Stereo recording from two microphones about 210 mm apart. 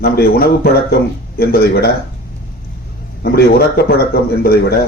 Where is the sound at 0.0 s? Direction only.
50° left (ahead or behind).